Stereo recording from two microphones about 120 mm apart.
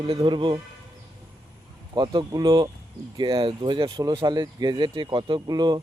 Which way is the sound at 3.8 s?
30° right (ahead or behind).